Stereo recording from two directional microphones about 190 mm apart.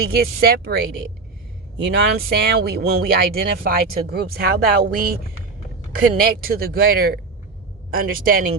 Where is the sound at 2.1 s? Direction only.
55° right (ahead or behind).